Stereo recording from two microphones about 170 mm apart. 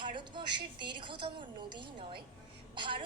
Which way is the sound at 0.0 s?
30° right (ahead or behind).